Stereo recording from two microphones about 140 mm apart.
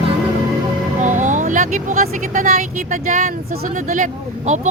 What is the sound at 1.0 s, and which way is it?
Speech, 65° right (ahead or behind).